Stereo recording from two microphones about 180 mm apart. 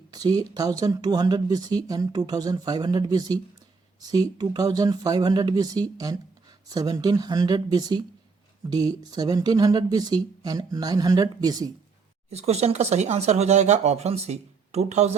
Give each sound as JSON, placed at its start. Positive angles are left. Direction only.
{"t": 0.1, "sound": "speech", "side_deg": -20}
{"t": 12.3, "sound": "speech", "side_deg": -35}